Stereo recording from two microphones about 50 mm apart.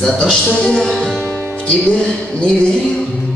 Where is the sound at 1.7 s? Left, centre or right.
Left.